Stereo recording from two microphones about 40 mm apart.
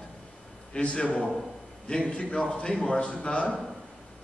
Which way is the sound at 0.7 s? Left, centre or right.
Left.